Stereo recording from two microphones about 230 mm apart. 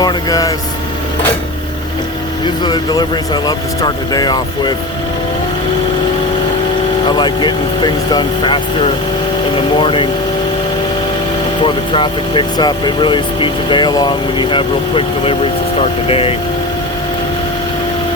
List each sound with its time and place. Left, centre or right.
0.0 s vehicle: centre
2.6 s speech: centre
7.1 s speech: centre
11.6 s speech: left